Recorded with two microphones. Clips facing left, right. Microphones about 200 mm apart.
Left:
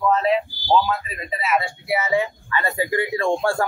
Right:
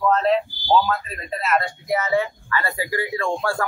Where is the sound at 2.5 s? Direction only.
20° left (ahead or behind).